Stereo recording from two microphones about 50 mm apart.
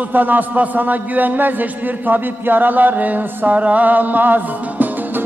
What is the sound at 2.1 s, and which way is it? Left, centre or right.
Chant, right.